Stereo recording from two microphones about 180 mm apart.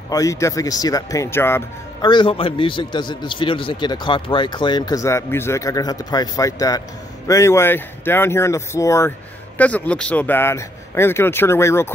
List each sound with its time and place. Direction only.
0.1 s a man's voice: 20° left (ahead or behind)
2.0 s a man's voice: 25° left (ahead or behind)